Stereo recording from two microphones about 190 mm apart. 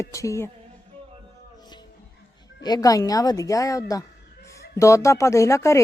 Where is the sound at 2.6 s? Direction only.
20° left (ahead or behind).